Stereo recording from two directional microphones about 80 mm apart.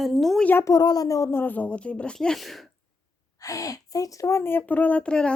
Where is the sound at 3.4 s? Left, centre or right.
Left; by 5.3 s centre.